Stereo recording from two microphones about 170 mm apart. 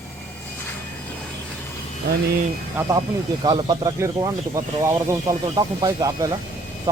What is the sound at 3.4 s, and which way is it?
Speech, 25° right (ahead or behind).